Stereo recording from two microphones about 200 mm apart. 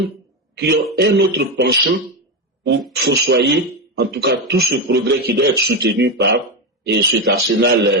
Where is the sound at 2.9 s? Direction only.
55° right (ahead or behind).